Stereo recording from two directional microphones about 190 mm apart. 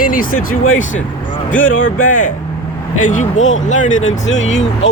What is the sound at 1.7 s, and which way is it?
Speech, 45° left (ahead or behind).